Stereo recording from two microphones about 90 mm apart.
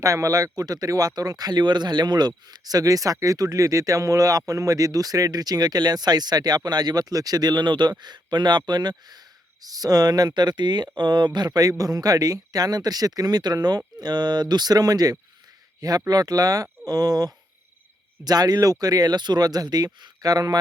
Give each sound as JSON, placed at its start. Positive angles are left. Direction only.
{"t": 0.0, "sound": "speech", "side_deg": -35}